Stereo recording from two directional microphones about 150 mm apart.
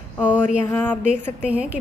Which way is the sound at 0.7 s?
15° left (ahead or behind).